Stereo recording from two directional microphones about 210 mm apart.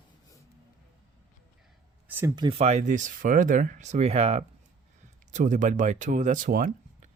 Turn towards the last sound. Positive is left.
turn(degrees=-40)  # may be behind; listen again after turning